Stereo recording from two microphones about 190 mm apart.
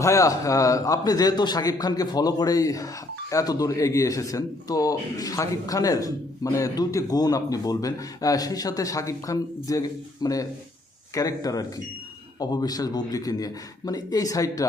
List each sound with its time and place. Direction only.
0.0 s a man's voice: 15° left (ahead or behind)